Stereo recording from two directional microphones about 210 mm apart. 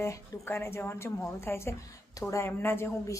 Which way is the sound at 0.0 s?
10° left (ahead or behind).